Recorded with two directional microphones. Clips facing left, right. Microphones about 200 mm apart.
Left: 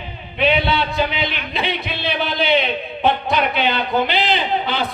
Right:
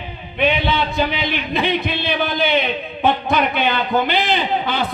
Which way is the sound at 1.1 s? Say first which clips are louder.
Right 3 dB; 50° right (ahead or behind).